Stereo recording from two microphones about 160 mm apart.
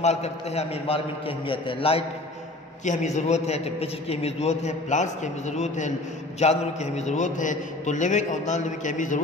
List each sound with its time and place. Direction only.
0.0 s a man's voice: 45° left (ahead or behind)
2.8 s a man's voice: 50° left (ahead or behind)